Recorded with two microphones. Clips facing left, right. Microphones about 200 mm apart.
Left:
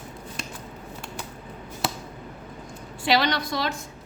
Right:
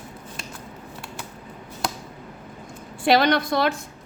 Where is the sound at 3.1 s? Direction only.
50° right (ahead or behind).